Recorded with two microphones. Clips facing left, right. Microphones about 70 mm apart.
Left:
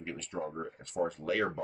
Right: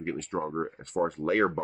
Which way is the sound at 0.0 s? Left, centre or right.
Right.